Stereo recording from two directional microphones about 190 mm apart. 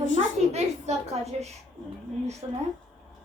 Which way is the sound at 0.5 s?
35° right (ahead or behind).